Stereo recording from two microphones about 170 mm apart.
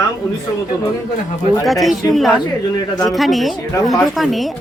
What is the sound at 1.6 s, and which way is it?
Speech, centre (ahead or behind).